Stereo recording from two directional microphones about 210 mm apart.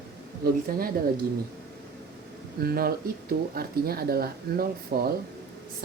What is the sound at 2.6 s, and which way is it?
Speech, 45° right (ahead or behind).